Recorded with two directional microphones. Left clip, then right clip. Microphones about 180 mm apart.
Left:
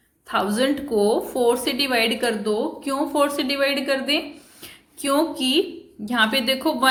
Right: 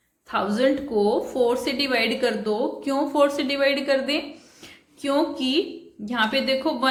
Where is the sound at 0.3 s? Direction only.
25° left (ahead or behind).